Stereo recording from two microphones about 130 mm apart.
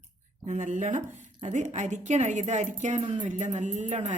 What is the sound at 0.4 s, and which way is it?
A woman's voice, 65° right (ahead or behind).